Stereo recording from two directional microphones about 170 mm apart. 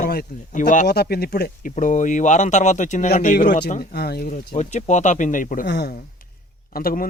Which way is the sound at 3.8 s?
70° left (ahead or behind).